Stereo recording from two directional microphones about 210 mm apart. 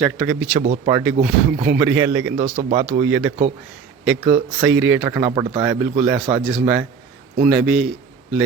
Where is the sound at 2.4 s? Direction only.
35° right (ahead or behind).